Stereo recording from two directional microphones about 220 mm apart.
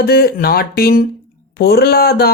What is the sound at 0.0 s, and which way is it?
Speech, 45° left (ahead or behind).